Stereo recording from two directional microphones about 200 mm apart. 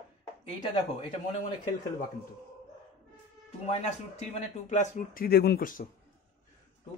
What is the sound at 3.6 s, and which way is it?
A man's voice, 35° left (ahead or behind).